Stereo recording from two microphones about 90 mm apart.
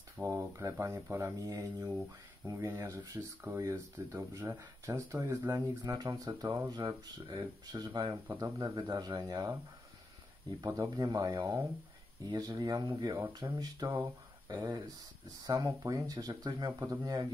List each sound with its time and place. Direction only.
0.2 s speech: 30° right (ahead or behind)
5.9 s speech: 45° right (ahead or behind)
10.6 s speech: 40° right (ahead or behind)